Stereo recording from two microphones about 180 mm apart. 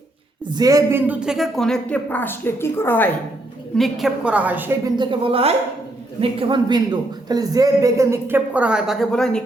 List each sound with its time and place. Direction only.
0.5 s speech: 20° right (ahead or behind); by 3.1 s 10° left (ahead or behind)
3.8 s a man's voice: centre (ahead or behind)
4.9 s a woman's voice: 30° right (ahead or behind); by 9.4 s 5° left (ahead or behind)